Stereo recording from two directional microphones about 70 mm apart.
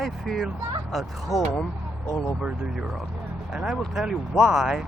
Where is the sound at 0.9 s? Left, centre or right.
Centre.